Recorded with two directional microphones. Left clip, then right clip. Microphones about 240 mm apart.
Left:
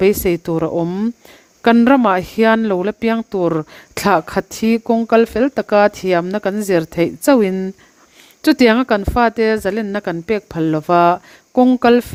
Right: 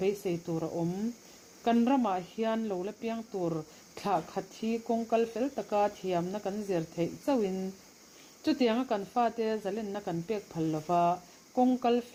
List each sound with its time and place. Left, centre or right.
0.0 s speech: left